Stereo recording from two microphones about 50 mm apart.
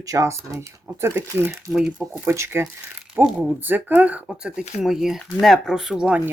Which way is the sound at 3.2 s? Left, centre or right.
Right.